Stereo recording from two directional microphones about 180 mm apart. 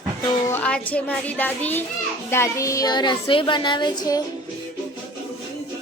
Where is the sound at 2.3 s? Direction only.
15° left (ahead or behind).